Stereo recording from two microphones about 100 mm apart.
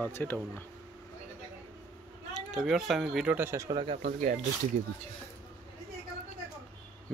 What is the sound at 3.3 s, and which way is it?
Speech, 25° right (ahead or behind).